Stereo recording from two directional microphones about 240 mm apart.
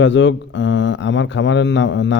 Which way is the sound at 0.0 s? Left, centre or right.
Left.